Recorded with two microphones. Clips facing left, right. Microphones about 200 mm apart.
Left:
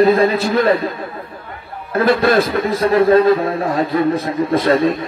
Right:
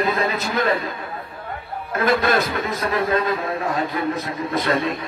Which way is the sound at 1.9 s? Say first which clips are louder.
Left 6 dB; 30° left (ahead or behind).